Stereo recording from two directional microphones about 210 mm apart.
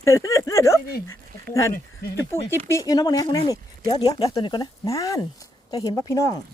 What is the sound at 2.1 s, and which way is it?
Speech, 10° left (ahead or behind).